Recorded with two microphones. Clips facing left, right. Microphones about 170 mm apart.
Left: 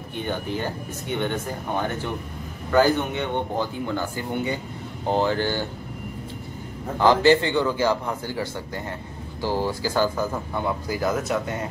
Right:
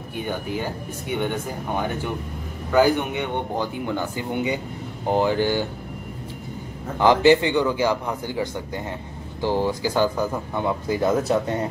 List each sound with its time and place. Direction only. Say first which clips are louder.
0.1 s speech: even; 10° right (ahead or behind)
7.0 s speech: right 1 dB; 15° right (ahead or behind)